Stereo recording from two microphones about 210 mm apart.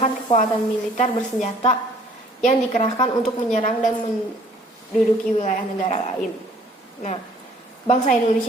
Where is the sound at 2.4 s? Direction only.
35° left (ahead or behind).